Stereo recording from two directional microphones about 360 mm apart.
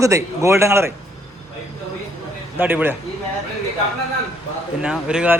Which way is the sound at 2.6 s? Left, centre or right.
Centre.